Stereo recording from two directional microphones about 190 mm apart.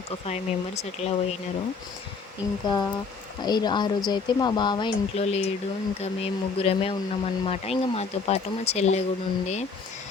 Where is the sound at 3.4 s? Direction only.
20° left (ahead or behind).